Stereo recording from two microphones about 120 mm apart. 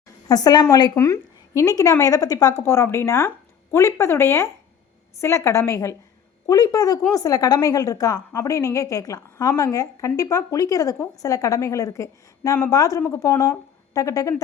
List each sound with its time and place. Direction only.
0.3 s a woman's voice: 35° left (ahead or behind)